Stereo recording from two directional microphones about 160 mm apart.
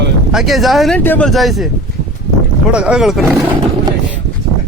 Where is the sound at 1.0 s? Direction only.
10° left (ahead or behind).